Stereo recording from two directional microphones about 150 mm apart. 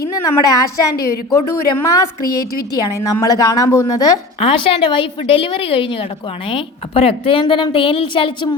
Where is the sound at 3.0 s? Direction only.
25° left (ahead or behind).